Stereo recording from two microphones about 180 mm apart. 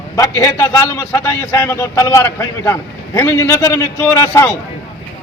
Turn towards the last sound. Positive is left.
turn(degrees=15)  # may be behind; listen again after turning